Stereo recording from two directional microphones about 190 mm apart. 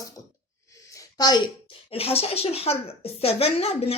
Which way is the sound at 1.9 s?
30° left (ahead or behind).